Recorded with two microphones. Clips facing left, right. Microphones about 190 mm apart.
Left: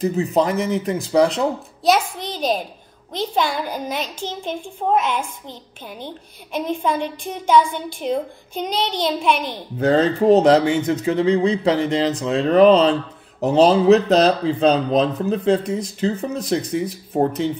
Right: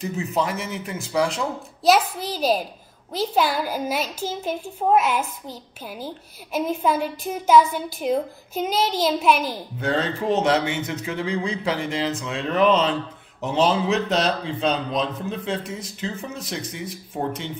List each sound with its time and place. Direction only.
0.0 s a man's voice: 35° left (ahead or behind)
1.8 s a child's voice: 5° right (ahead or behind)
9.8 s a man's voice: 40° left (ahead or behind)